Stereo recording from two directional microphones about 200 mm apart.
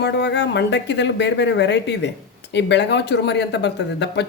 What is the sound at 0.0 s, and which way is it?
Speech, 55° left (ahead or behind).